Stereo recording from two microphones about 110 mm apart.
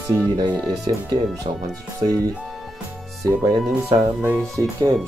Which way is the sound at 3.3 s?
35° right (ahead or behind).